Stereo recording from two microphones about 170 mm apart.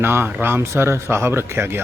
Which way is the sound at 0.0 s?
15° right (ahead or behind).